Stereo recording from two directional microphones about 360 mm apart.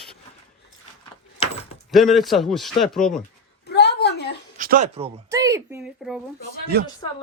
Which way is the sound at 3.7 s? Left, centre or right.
Left.